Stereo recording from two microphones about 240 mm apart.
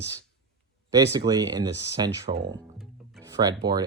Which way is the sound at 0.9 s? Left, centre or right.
Centre.